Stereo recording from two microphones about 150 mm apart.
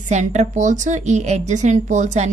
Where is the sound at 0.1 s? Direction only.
50° right (ahead or behind).